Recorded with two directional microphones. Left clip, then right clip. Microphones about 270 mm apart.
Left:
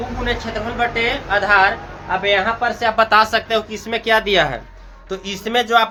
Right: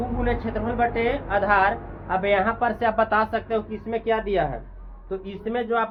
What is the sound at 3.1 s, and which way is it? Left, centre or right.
Speech, centre.